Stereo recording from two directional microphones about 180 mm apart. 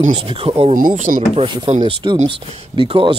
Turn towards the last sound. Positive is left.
turn(degrees=-30)  # may be behind; listen again after turning